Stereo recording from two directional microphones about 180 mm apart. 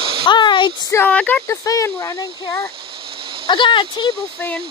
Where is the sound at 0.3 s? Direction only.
25° left (ahead or behind).